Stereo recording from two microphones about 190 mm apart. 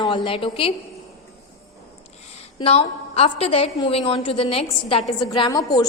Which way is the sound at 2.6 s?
30° left (ahead or behind).